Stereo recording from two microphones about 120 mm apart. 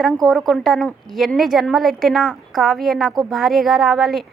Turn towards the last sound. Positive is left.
turn(degrees=0)  # may be behind; listen again after turning